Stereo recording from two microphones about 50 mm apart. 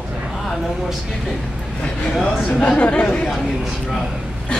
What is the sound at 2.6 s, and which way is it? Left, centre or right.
Speech, left.